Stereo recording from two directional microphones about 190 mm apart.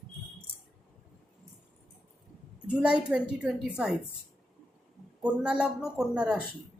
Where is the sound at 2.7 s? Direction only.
5° right (ahead or behind).